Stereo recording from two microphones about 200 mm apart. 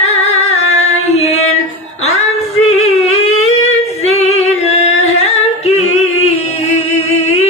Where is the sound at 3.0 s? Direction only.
30° left (ahead or behind).